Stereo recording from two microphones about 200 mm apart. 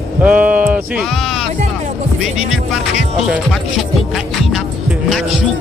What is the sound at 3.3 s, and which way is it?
Speech, centre (ahead or behind).